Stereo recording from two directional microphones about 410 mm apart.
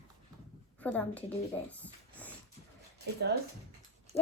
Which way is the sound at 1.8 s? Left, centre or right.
Centre.